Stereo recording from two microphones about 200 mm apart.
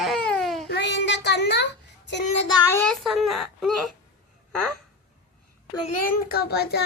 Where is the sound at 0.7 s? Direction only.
60° left (ahead or behind).